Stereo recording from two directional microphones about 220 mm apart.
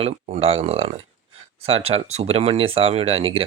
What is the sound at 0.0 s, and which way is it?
Speech, 25° right (ahead or behind).